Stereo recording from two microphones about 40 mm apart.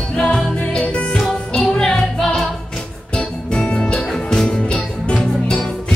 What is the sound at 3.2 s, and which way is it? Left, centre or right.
Music, left.